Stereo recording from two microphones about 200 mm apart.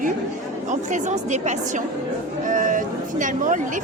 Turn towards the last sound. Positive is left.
turn(degrees=-40)  # may be behind; listen again after turning